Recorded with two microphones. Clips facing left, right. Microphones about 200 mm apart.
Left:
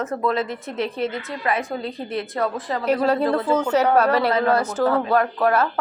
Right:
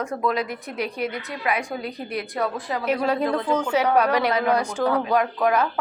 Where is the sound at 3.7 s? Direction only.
10° right (ahead or behind).